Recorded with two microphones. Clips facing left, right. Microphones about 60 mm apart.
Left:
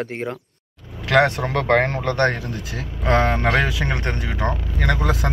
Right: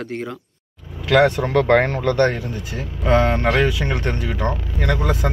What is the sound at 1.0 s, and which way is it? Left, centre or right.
A man's voice, left.